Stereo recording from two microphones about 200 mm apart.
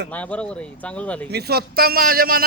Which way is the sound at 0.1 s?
5° left (ahead or behind).